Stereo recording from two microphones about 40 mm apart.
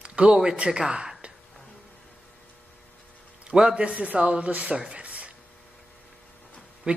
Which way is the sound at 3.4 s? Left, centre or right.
Right.